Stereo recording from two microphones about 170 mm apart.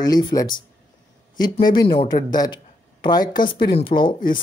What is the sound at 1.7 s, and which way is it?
A man's voice, 25° left (ahead or behind).